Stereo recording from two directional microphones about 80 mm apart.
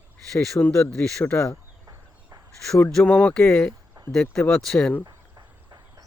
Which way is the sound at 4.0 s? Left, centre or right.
Right.